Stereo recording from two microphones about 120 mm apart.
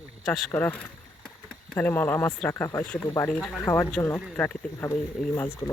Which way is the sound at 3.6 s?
25° left (ahead or behind).